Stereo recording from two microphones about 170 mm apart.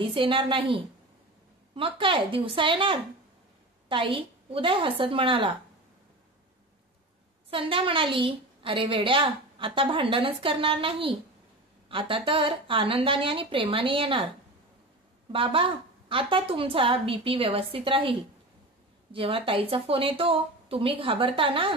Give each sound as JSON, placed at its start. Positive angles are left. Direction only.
{"t": 0.0, "sound": "a woman's voice", "side_deg": -30}
{"t": 7.5, "sound": "a woman's voice", "side_deg": -30}
{"t": 15.3, "sound": "a woman's voice", "side_deg": -30}
{"t": 19.1, "sound": "a woman's voice", "side_deg": -30}